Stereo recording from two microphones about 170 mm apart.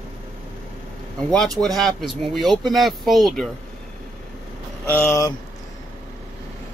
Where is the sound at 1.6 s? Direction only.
Centre (ahead or behind).